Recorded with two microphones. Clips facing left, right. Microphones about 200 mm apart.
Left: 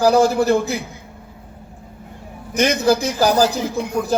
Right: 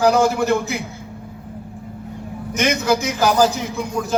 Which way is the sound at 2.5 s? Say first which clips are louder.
Left 3 dB; 35° left (ahead or behind).